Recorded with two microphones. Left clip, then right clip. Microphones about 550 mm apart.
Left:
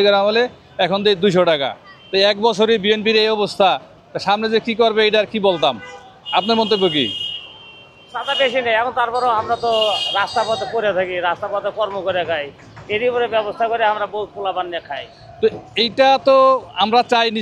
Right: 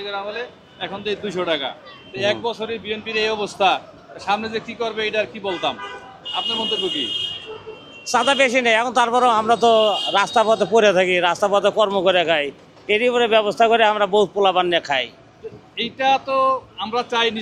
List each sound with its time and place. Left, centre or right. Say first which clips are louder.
0.0 s a man's voice: left 13 dB; left
8.1 s a man's voice: right 2 dB; right
15.7 s a man's voice: left 3 dB; left